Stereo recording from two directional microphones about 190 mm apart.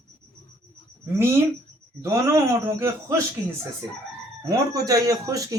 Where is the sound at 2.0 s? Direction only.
15° right (ahead or behind).